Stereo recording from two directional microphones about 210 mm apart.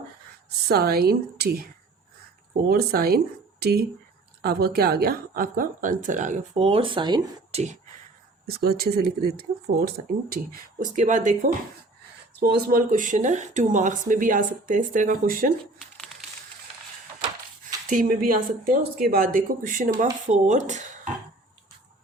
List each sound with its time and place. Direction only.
0.7 s a woman's voice: 50° right (ahead or behind); by 7.6 s 20° right (ahead or behind)
8.4 s a woman's voice: 45° right (ahead or behind)
12.4 s speech: 45° right (ahead or behind)
17.9 s speech: 40° right (ahead or behind)